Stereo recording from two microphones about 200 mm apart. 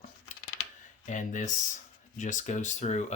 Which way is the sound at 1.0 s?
40° left (ahead or behind).